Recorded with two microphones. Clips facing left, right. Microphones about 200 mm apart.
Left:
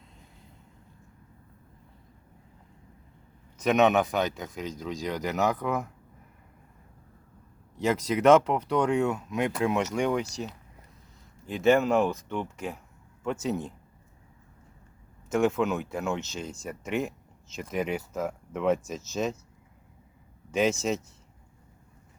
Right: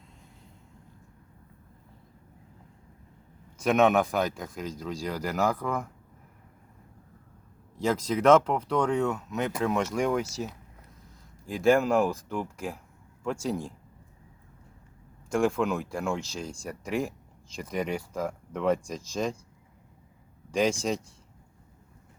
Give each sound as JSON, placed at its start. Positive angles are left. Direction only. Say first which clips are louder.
{"t": 3.6, "sound": "speech", "louder": "even", "side_deg": 0}
{"t": 7.9, "sound": "speech", "louder": "left 1 dB", "side_deg": 5}
{"t": 15.3, "sound": "speech", "louder": "left 1 dB", "side_deg": 5}
{"t": 20.5, "sound": "speech", "louder": "even", "side_deg": 5}